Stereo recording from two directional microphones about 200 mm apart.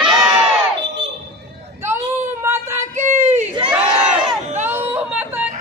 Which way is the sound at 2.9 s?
35° right (ahead or behind).